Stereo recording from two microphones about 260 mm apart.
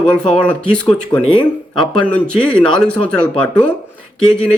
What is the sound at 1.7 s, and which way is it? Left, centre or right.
Speech, centre.